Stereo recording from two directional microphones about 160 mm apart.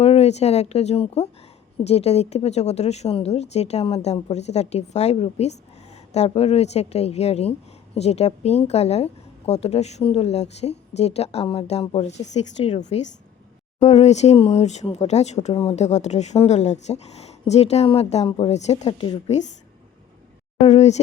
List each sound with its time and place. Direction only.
0.0 s a woman's voice: 40° left (ahead or behind)
20.7 s speech: 45° left (ahead or behind)